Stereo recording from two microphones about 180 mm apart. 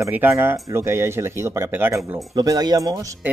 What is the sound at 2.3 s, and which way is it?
Speech, 20° right (ahead or behind).